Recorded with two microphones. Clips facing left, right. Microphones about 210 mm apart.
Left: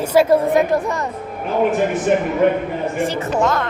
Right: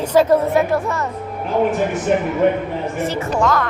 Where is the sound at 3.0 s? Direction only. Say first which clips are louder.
Even; 25° left (ahead or behind).